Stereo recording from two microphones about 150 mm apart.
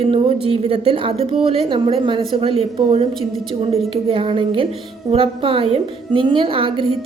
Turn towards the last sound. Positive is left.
turn(degrees=-35)  # may be behind; listen again after turning